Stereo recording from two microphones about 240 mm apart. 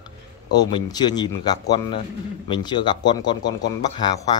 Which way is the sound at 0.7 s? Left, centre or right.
Centre.